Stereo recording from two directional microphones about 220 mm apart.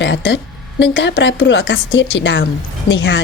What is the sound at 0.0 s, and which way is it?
A woman's voice, 55° left (ahead or behind).